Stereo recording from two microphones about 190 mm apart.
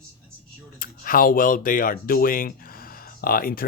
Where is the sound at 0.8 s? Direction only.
50° left (ahead or behind).